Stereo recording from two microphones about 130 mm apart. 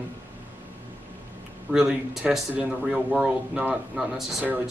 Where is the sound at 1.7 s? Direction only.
5° right (ahead or behind).